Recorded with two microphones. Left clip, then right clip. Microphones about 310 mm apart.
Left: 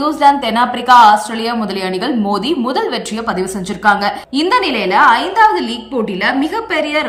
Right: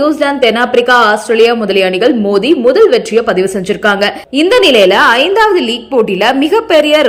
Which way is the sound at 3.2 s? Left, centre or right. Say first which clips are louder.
Right 7 dB; centre.